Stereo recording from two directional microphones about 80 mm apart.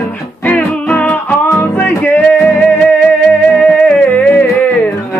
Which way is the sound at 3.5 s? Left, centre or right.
Centre.